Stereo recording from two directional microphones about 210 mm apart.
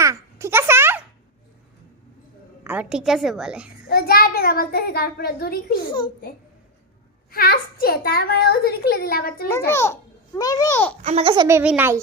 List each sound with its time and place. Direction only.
0.0 s a sound: 15° right (ahead or behind)
2.6 s a woman's voice: 5° right (ahead or behind)
3.8 s a child's voice: 45° left (ahead or behind)
7.3 s a child's voice: 45° left (ahead or behind)
9.5 s a child's voice: 10° left (ahead or behind)
11.0 s a child's voice: 30° right (ahead or behind)
11.4 s a woman's voice: 10° right (ahead or behind)